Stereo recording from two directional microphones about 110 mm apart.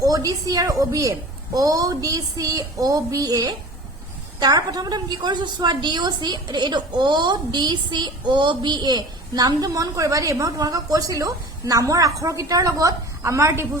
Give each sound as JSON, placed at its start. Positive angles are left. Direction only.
{"t": 0.0, "sound": "a woman's voice", "side_deg": -35}